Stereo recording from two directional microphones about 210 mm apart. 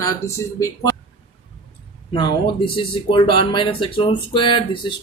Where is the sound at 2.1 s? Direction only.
25° left (ahead or behind).